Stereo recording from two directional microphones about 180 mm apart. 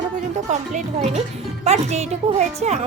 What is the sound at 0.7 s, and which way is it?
Speech, 40° right (ahead or behind).